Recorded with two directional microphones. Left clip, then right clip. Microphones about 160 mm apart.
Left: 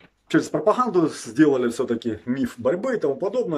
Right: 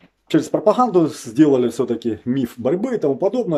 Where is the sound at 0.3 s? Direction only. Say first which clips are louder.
Right 4 dB; 20° right (ahead or behind).